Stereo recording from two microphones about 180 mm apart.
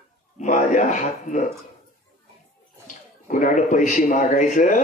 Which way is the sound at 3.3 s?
45° left (ahead or behind).